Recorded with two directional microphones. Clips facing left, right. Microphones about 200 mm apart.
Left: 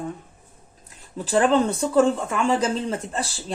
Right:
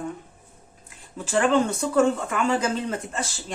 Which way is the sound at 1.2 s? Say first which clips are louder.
Left 2 dB; 35° left (ahead or behind).